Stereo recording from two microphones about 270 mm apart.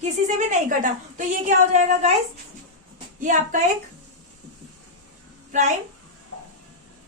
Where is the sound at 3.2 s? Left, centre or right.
Right.